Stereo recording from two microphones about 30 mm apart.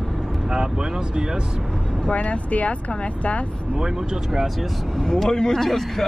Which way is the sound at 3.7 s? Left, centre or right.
Right.